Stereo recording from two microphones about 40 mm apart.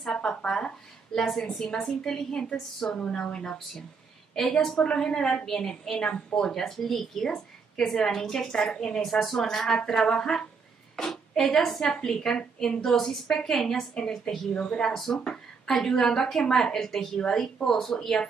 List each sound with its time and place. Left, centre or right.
0.1 s speech: left
1.1 s a woman's voice: centre
3.0 s a woman's voice: centre
4.7 s a woman's voice: left
6.6 s a woman's voice: centre
9.0 s a woman's voice: centre
14.5 s a woman's voice: left
15.2 s a woman's voice: centre